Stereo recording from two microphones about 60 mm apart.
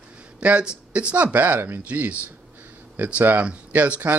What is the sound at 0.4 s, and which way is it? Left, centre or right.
Speech, centre.